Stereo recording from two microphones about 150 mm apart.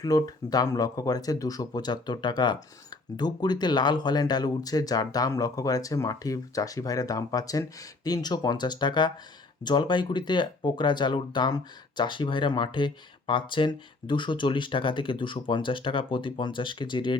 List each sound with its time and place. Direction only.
0.0 s speech: 25° left (ahead or behind)